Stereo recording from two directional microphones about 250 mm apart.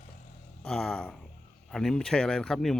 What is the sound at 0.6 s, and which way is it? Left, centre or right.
Speech, centre.